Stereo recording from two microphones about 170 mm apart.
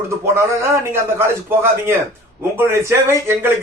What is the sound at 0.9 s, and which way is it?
A man's voice, 15° right (ahead or behind).